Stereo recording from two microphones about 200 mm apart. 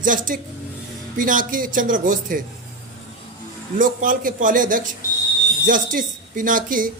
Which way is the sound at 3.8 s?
45° right (ahead or behind).